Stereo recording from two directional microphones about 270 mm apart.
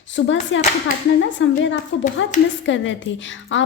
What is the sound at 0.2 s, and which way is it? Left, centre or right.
A woman's voice, left.